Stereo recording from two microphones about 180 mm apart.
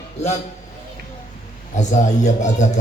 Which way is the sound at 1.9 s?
40° left (ahead or behind).